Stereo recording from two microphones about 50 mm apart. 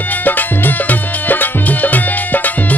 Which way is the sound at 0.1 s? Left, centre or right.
Left.